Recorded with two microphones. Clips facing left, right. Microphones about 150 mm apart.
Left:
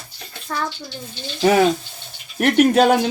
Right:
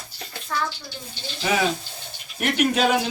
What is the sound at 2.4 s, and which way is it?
Speech, 50° left (ahead or behind).